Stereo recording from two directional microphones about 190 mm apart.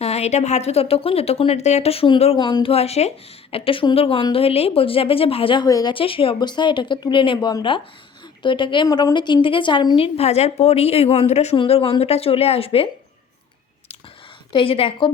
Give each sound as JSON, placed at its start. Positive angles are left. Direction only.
{"t": 0.0, "sound": "a woman's voice", "side_deg": 35}
{"t": 14.5, "sound": "a woman's voice", "side_deg": 30}